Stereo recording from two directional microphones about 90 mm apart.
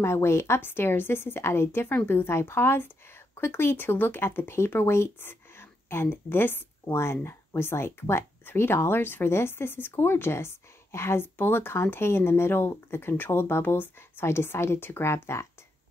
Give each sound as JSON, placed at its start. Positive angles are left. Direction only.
{"t": 0.0, "sound": "speech", "side_deg": 30}